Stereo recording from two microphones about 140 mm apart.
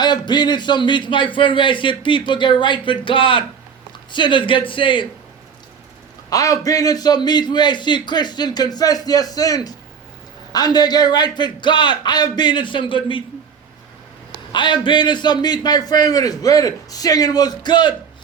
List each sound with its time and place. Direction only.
0.0 s a man's voice: 30° left (ahead or behind)
6.3 s a man's voice: 25° left (ahead or behind)
14.5 s a man's voice: 35° left (ahead or behind)